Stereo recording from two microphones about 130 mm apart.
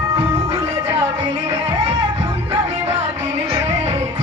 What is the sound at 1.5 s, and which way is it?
Music, 55° right (ahead or behind).